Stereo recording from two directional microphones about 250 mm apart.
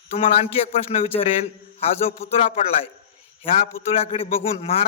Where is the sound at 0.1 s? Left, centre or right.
Left.